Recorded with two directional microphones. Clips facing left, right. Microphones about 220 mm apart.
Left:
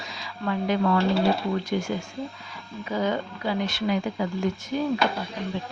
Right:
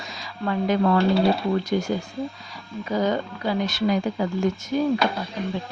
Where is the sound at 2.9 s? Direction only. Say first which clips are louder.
Right 3 dB; 40° right (ahead or behind).